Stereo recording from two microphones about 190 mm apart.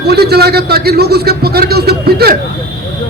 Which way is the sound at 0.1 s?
55° right (ahead or behind).